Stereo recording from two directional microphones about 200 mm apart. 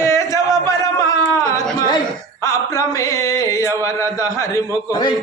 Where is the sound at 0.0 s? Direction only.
15° left (ahead or behind).